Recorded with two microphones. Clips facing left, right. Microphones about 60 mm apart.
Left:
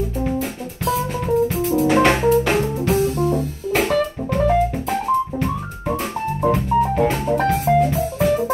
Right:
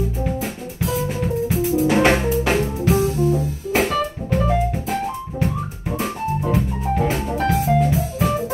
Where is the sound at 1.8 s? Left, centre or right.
Centre.